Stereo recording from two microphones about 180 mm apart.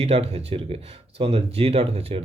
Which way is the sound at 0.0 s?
35° right (ahead or behind).